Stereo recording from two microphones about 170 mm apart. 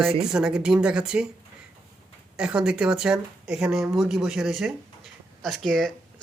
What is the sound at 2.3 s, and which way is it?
Speech, 5° right (ahead or behind).